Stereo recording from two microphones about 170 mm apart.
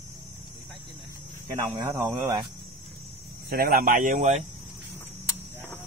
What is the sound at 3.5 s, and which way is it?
Speech, 60° right (ahead or behind).